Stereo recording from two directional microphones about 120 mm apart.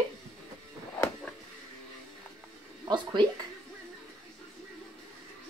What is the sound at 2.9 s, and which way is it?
Speech, 35° right (ahead or behind).